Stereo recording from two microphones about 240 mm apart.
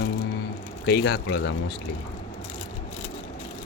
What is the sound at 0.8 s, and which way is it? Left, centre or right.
Speech, left.